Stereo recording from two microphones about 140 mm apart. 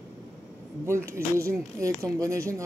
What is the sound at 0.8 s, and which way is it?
A man's voice, 20° right (ahead or behind).